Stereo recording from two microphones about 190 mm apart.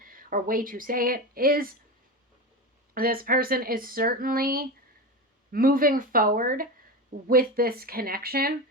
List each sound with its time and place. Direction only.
0.0 s speech: 45° right (ahead or behind)
2.9 s speech: 50° right (ahead or behind)